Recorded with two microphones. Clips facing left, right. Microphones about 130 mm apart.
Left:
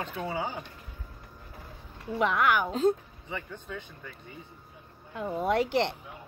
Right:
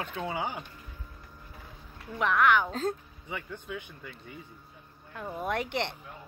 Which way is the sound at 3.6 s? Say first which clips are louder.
Right 1 dB; 10° right (ahead or behind).